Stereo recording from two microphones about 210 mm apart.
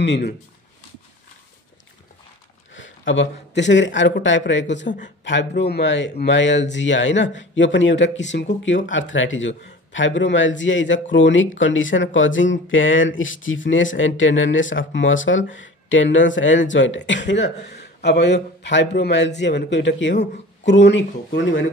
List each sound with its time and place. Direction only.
0.0 s speech: 55° left (ahead or behind)
2.7 s speech: 60° left (ahead or behind)
4.8 s speech: 35° left (ahead or behind)
5.2 s speech: 55° left (ahead or behind)